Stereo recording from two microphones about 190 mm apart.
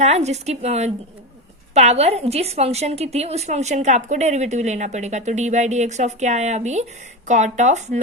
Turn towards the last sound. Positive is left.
turn(degrees=-40)  # may be behind; listen again after turning